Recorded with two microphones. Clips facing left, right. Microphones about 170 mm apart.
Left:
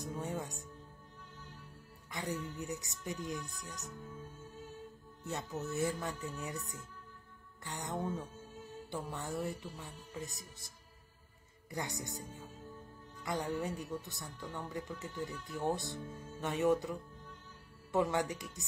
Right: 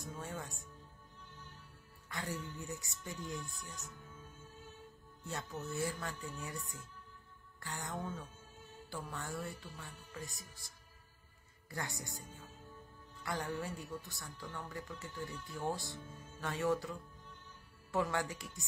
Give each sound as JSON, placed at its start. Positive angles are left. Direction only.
{"t": 0.0, "sound": "speech", "side_deg": 20}
{"t": 2.0, "sound": "music", "side_deg": 20}
{"t": 2.5, "sound": "speech", "side_deg": 20}
{"t": 5.2, "sound": "speech", "side_deg": 20}
{"t": 11.7, "sound": "speech", "side_deg": 20}